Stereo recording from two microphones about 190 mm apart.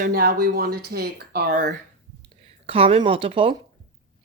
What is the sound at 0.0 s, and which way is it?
Speech, 55° right (ahead or behind).